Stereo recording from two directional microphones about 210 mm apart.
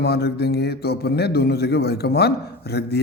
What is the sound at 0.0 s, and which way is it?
Speech, 50° left (ahead or behind).